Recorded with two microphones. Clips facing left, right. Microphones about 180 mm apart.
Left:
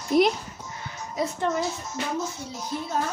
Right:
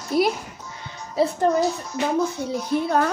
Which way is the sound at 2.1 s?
65° right (ahead or behind).